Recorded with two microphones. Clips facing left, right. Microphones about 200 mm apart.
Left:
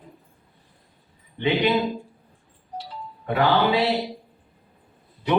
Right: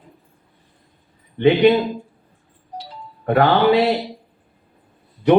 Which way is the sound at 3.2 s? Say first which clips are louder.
Right 6 dB; 55° right (ahead or behind).